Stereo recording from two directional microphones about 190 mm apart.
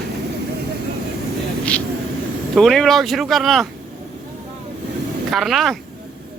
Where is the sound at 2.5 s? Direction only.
Centre (ahead or behind).